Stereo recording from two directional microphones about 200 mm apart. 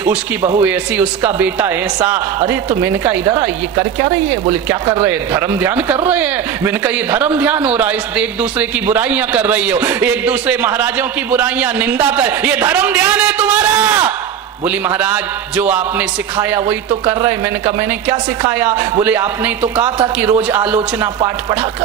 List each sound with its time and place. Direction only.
0.6 s a man's voice: 10° right (ahead or behind)